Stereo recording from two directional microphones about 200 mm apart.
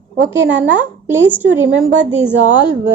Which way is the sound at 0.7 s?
10° right (ahead or behind).